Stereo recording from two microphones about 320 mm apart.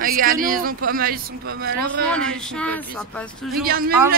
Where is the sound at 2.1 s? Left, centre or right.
Centre.